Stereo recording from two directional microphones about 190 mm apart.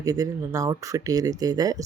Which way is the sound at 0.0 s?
20° right (ahead or behind).